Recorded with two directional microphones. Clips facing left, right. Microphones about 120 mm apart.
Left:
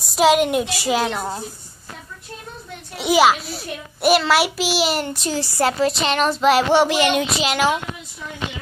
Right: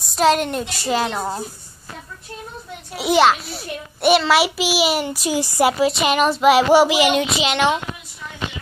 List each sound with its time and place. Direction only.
0.0 s a child's voice: 5° left (ahead or behind)
1.1 s speech: 5° right (ahead or behind)
3.0 s a child's voice: 5° left (ahead or behind)